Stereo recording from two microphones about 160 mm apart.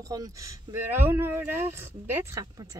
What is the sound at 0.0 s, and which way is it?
Speech, 20° right (ahead or behind).